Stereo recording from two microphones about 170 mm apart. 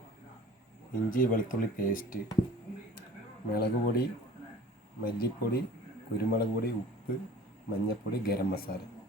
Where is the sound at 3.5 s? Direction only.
65° left (ahead or behind).